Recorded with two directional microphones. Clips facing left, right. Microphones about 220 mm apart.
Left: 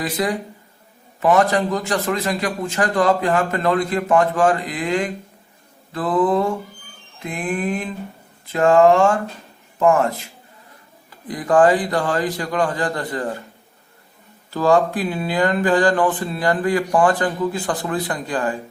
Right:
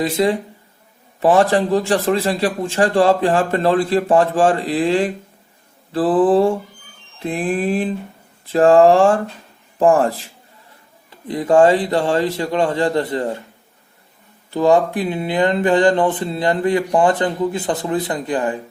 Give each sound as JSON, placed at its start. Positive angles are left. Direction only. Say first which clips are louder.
{"t": 0.0, "sound": "mantra", "louder": "right 5 dB", "side_deg": -25}
{"t": 1.2, "sound": "a man's voice", "louder": "right 2 dB", "side_deg": -30}
{"t": 11.1, "sound": "mantra", "louder": "right 3 dB", "side_deg": -25}
{"t": 14.5, "sound": "mantra", "louder": "right 2 dB", "side_deg": -20}